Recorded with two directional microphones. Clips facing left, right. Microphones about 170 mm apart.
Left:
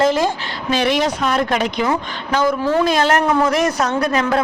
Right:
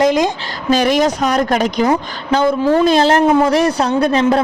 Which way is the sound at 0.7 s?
40° right (ahead or behind).